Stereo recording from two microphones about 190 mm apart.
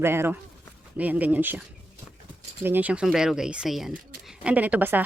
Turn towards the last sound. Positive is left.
turn(degrees=-10)  # may be behind; listen again after turning